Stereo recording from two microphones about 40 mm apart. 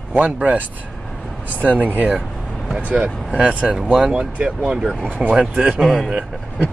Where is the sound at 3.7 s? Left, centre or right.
Centre.